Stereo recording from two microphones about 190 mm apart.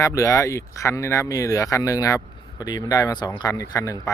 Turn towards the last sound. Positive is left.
turn(degrees=15)  # may be behind; listen again after turning